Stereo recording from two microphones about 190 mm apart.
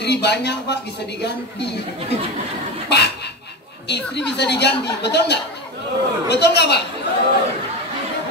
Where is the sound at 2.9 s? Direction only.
60° left (ahead or behind).